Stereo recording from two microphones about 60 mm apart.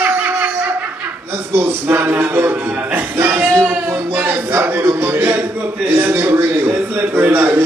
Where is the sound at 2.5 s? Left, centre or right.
Right.